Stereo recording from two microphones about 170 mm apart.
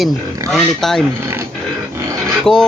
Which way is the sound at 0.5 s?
Centre (ahead or behind).